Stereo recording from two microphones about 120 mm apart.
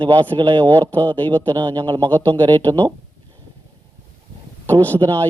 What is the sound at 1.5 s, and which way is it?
Speech, 40° right (ahead or behind).